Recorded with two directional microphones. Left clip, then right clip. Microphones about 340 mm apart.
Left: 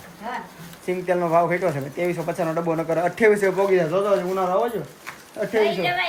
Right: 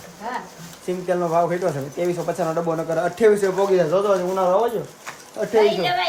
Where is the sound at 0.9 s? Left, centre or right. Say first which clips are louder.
Left 1 dB; centre.